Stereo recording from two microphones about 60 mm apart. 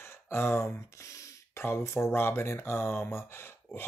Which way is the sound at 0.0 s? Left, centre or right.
Left.